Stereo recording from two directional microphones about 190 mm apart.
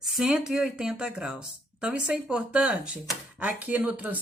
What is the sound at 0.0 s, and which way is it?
Speech, centre (ahead or behind).